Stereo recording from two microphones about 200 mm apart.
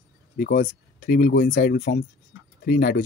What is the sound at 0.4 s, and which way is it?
Speech, 45° left (ahead or behind).